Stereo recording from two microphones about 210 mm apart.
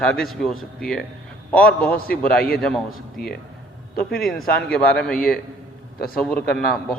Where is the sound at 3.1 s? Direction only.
45° left (ahead or behind).